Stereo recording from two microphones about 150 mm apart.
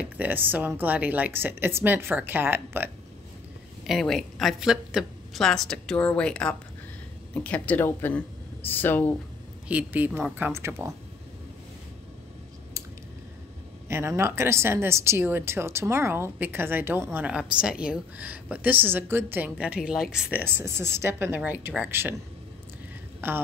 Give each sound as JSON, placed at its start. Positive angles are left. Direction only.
{"t": 0.0, "sound": "a woman's voice", "side_deg": -10}
{"t": 3.8, "sound": "a woman's voice", "side_deg": 0}
{"t": 9.7, "sound": "a woman's voice", "side_deg": -10}
{"t": 13.8, "sound": "a woman's voice", "side_deg": -15}
{"t": 23.2, "sound": "a woman's voice", "side_deg": -15}